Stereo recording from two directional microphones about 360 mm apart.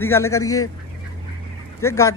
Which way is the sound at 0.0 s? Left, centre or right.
Centre.